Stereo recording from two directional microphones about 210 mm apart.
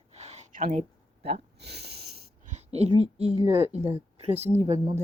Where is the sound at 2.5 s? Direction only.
30° right (ahead or behind).